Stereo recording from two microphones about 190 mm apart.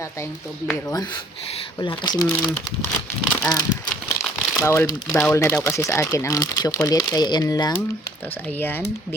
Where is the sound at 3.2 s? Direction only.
15° left (ahead or behind).